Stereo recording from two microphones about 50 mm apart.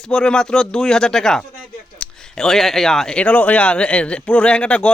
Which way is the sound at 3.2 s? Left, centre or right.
Left.